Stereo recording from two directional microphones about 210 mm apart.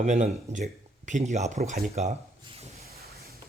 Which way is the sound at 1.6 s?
45° right (ahead or behind).